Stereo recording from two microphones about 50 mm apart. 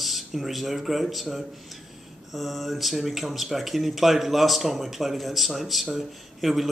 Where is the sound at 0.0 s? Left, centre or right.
Centre.